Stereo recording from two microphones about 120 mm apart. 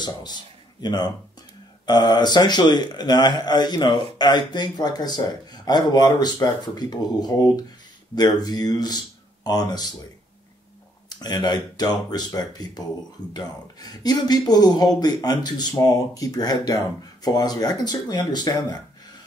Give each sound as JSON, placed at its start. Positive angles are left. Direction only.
{"t": 0.0, "sound": "a man's voice", "side_deg": 35}
{"t": 11.1, "sound": "a man's voice", "side_deg": 35}